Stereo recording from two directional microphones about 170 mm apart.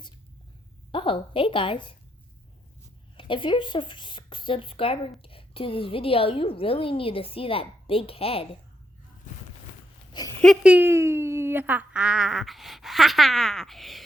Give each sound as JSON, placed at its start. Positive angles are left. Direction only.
{"t": 0.9, "sound": "a woman's voice", "side_deg": 30}
{"t": 3.2, "sound": "speech", "side_deg": 30}
{"t": 10.1, "sound": "a sound", "side_deg": 25}
{"t": 10.4, "sound": "speech", "side_deg": 0}